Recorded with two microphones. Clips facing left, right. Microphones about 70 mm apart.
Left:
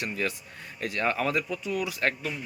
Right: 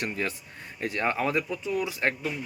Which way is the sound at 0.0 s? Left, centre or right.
Right.